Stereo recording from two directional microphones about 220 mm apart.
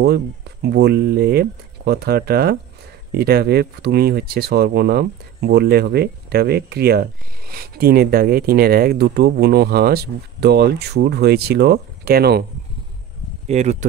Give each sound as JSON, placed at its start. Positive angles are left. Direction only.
{"t": 0.0, "sound": "speech", "side_deg": -50}
{"t": 13.5, "sound": "speech", "side_deg": -30}